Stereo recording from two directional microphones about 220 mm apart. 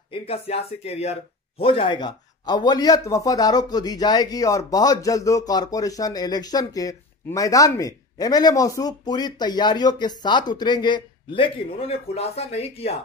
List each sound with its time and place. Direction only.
0.1 s speech: 25° left (ahead or behind)